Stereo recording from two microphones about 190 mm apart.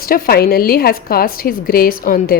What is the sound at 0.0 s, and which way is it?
A woman's voice, 50° left (ahead or behind).